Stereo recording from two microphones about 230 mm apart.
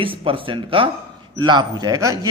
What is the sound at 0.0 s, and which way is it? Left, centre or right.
A man's voice, right.